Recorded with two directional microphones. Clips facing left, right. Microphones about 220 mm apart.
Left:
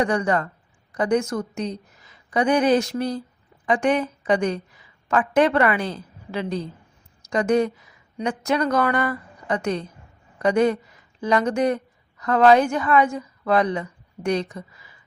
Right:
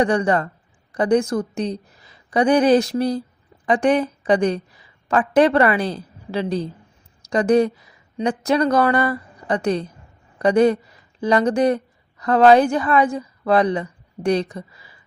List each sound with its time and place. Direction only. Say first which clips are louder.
0.0 s a woman's voice: right 3 dB; 30° right (ahead or behind)